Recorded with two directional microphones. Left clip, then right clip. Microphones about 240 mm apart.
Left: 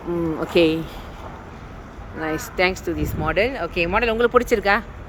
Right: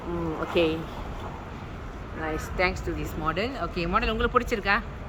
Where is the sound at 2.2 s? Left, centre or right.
Left.